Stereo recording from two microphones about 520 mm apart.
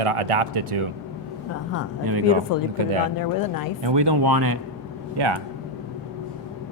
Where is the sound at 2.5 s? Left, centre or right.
Left.